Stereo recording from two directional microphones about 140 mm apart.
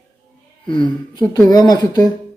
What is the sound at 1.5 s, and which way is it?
Speech, 30° left (ahead or behind).